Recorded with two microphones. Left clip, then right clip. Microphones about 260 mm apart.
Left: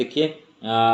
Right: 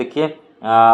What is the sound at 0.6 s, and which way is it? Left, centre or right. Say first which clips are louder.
Speech: right 8 dB; centre.